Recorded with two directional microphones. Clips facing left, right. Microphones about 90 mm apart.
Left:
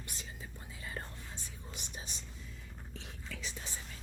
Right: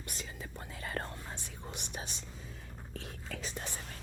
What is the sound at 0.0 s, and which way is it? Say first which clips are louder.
Whispering: right 4 dB; 65° right (ahead or behind).